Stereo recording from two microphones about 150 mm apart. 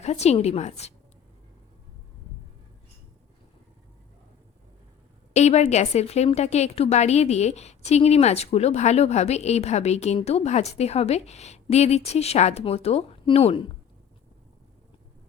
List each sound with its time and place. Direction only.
0.0 s a woman's voice: 45° left (ahead or behind)
5.3 s a woman's voice: 50° left (ahead or behind)